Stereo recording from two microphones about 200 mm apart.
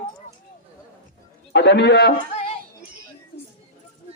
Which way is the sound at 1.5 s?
60° left (ahead or behind).